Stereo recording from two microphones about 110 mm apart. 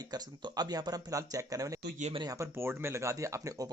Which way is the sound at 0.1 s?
40° right (ahead or behind).